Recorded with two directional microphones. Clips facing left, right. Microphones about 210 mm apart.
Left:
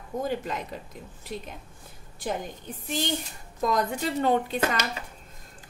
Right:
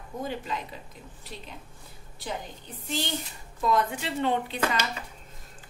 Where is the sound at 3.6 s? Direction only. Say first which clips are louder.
Left 1 dB; 40° left (ahead or behind).